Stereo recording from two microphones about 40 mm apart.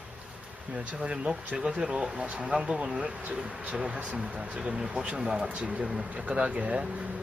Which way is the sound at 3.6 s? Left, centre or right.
Right.